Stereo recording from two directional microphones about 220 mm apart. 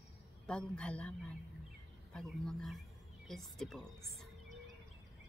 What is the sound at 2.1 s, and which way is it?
Speech, centre (ahead or behind).